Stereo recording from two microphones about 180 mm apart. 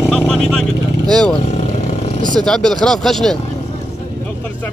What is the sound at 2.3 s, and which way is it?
Speech, 5° left (ahead or behind).